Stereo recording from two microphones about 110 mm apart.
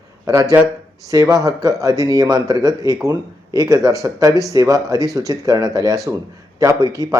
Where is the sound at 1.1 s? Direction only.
30° right (ahead or behind).